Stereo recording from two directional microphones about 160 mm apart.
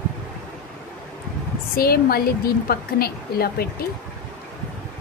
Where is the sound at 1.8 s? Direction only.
70° left (ahead or behind).